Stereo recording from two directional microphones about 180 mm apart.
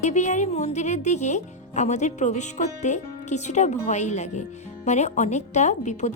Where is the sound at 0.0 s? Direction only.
40° left (ahead or behind).